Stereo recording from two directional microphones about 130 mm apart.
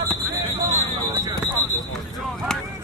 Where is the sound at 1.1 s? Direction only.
30° right (ahead or behind).